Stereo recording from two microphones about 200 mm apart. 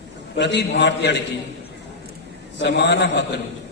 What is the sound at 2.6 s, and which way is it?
Speech, 60° left (ahead or behind).